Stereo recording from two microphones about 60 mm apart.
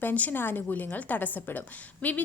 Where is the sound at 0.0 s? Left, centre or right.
Left.